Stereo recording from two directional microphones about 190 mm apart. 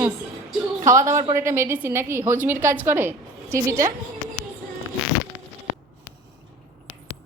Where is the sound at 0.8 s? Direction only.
15° right (ahead or behind).